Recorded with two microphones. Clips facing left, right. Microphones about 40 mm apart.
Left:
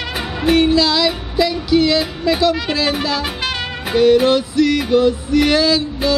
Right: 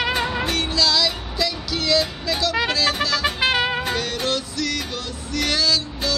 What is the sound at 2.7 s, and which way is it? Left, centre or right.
Speech, centre.